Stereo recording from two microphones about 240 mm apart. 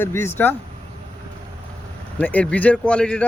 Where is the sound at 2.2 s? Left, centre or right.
Centre.